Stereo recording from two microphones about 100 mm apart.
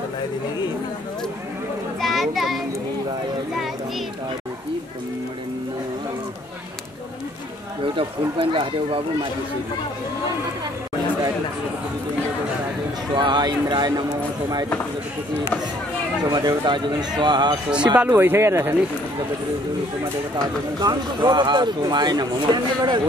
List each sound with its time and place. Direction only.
2.0 s children playing: centre (ahead or behind)
7.8 s speech: 60° right (ahead or behind)
13.1 s speech: 45° right (ahead or behind)
16.3 s speech: 40° right (ahead or behind)
18.1 s speech: 25° right (ahead or behind)
20.8 s speech: 45° right (ahead or behind)